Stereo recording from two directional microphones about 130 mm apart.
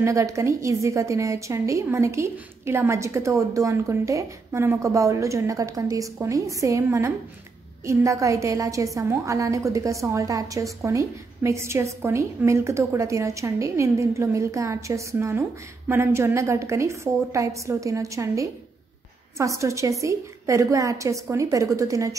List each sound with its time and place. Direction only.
0.0 s a woman's voice: 20° right (ahead or behind)